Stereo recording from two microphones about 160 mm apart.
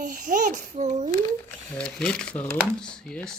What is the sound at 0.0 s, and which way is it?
A child's voice, 55° right (ahead or behind).